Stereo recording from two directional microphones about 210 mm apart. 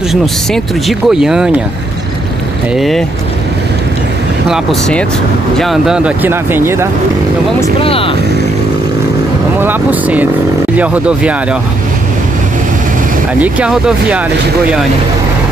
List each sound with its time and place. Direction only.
0.1 s speech: centre (ahead or behind)
2.7 s speech: centre (ahead or behind)
4.5 s speech: 5° left (ahead or behind)
7.8 s speech: 25° left (ahead or behind)
9.6 s speech: 10° right (ahead or behind)
13.4 s speech: 5° right (ahead or behind)